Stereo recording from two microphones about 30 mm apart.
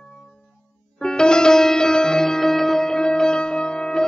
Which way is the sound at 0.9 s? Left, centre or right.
Left.